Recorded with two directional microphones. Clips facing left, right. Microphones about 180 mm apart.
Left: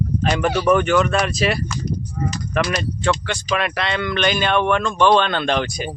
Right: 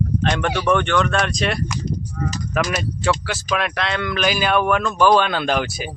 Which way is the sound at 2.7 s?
5° right (ahead or behind).